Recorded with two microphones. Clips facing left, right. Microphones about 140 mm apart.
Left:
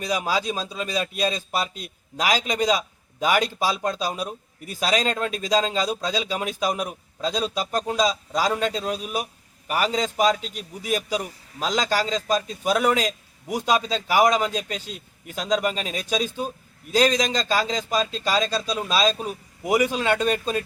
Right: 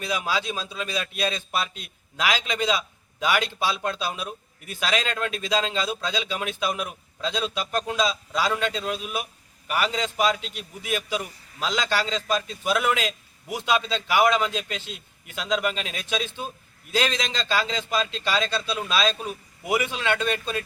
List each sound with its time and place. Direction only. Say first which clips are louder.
0.0 s a man's voice: left 3 dB; 40° left (ahead or behind)